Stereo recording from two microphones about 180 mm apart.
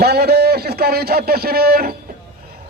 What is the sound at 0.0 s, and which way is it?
A man's voice, 60° right (ahead or behind).